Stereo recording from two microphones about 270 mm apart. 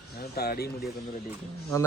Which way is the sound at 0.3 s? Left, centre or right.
Left.